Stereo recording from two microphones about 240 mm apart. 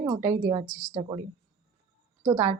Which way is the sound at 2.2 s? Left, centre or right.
Centre.